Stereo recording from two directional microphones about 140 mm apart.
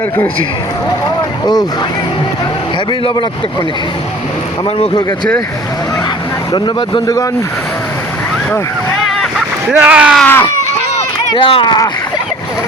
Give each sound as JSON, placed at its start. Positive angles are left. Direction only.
{"t": 6.5, "sound": "speech", "side_deg": 30}
{"t": 9.7, "sound": "speech", "side_deg": -10}
{"t": 10.2, "sound": "a sound", "side_deg": 10}
{"t": 11.3, "sound": "speech", "side_deg": 40}